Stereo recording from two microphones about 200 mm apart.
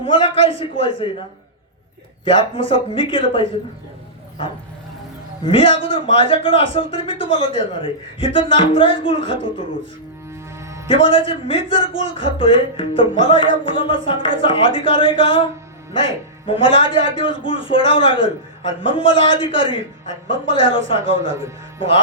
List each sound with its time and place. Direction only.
0.0 s speech: 25° left (ahead or behind)
2.2 s speech: 25° left (ahead or behind)
5.5 s speech: 25° left (ahead or behind)
10.6 s music: 15° right (ahead or behind)
10.8 s speech: 25° left (ahead or behind)